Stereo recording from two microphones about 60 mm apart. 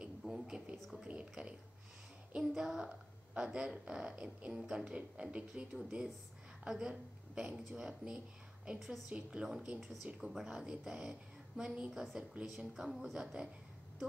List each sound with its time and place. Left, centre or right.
0.2 s a sound: centre
0.7 s a woman's voice: centre
1.0 s a woman's voice: centre
8.7 s a woman's voice: centre
9.1 s a woman's voice: centre